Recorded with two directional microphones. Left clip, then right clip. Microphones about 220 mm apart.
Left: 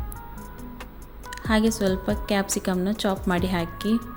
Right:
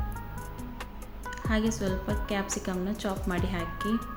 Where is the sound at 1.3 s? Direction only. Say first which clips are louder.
Left 7 dB; 40° left (ahead or behind).